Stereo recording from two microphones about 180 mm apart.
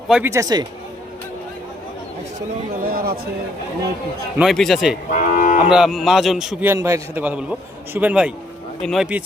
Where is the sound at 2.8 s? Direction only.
55° right (ahead or behind).